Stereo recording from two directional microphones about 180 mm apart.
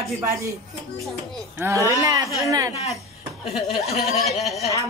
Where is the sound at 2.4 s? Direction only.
20° right (ahead or behind).